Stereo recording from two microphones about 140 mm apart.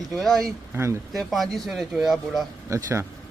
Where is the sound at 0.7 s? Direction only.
20° right (ahead or behind).